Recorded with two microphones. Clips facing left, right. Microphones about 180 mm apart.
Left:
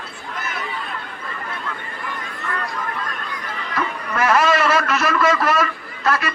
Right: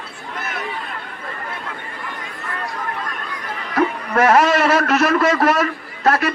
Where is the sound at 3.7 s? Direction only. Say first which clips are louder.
Right 7 dB; 55° right (ahead or behind).